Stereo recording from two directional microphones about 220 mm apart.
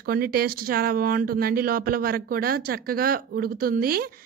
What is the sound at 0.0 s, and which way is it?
A woman's voice, 45° right (ahead or behind).